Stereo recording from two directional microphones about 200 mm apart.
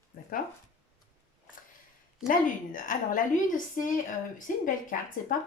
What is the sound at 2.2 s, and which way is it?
A woman's voice, 40° left (ahead or behind).